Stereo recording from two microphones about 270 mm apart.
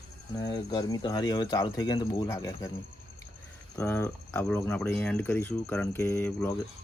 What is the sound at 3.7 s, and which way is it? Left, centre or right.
Speech, centre.